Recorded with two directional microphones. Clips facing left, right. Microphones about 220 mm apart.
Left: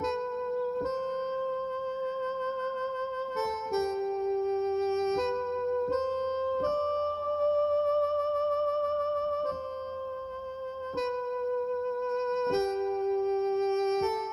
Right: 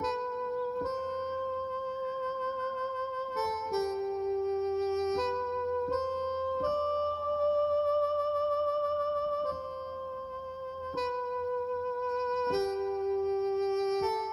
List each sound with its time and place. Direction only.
3.3 s harmonica: 25° left (ahead or behind)
12.2 s music: 25° left (ahead or behind)